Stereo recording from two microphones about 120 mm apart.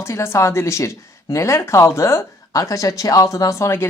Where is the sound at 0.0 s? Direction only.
20° left (ahead or behind).